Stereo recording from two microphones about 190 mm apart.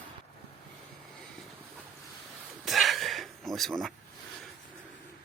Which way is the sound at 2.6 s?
Centre (ahead or behind).